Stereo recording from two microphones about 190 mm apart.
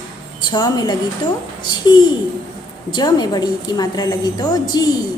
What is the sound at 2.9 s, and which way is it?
A woman's voice, 20° left (ahead or behind).